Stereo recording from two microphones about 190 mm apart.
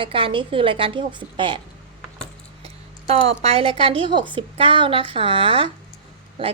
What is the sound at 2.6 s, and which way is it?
Speech, 35° right (ahead or behind).